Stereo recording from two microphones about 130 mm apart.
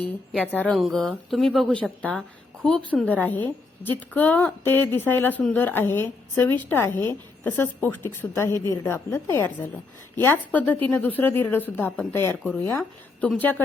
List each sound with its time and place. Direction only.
0.3 s a woman's voice: 10° left (ahead or behind)